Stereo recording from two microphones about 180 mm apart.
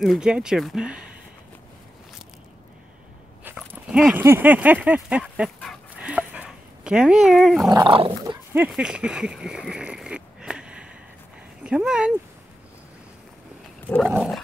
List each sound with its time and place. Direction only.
0.0 s speech: 5° right (ahead or behind)
3.4 s dog: 5° right (ahead or behind)
7.6 s dog: 20° right (ahead or behind)
8.5 s speech: 5° right (ahead or behind)
14.0 s speech: centre (ahead or behind)